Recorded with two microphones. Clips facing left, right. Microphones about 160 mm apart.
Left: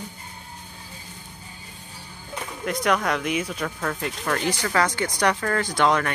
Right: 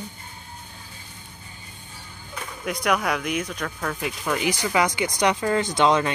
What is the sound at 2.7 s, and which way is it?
Speech, centre (ahead or behind).